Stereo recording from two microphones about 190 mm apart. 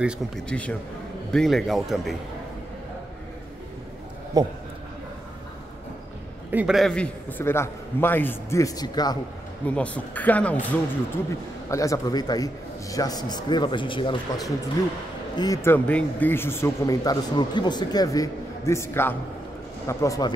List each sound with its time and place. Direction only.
0.5 s speech: 5° left (ahead or behind)
4.4 s a man's voice: 20° right (ahead or behind)
6.5 s speech: 5° right (ahead or behind); by 9.2 s 20° left (ahead or behind)
9.7 s speech: 5° left (ahead or behind)